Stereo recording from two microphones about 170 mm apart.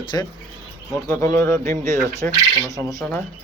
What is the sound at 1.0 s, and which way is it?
Speech, 15° left (ahead or behind).